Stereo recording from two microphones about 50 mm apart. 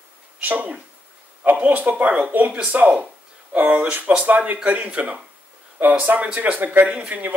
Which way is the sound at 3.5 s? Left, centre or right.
Right.